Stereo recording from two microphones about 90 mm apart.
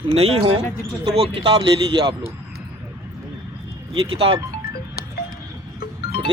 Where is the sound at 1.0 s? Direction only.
90° right; by 2.3 s 65° right (ahead or behind).